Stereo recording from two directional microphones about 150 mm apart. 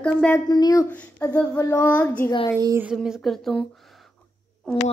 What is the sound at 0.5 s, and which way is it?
Speech, 25° left (ahead or behind).